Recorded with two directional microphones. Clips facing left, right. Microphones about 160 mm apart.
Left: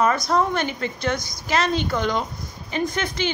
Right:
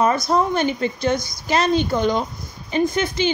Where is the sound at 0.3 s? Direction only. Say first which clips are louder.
Right 3 dB; 20° right (ahead or behind).